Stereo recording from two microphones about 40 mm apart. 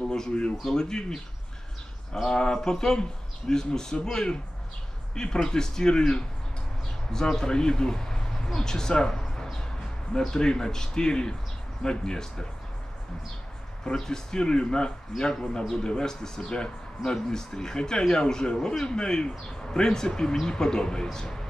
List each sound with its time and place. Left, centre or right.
0.1 s speech: centre
2.2 s speech: centre
13.9 s speech: centre